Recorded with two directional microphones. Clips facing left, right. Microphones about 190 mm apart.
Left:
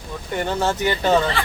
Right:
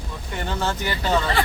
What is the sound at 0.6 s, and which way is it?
Speech, 20° left (ahead or behind).